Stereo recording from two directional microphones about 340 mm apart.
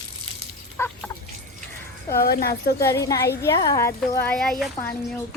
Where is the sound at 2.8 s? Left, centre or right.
Centre.